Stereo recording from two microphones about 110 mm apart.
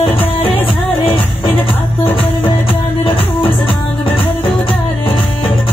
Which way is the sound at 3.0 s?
55° left (ahead or behind).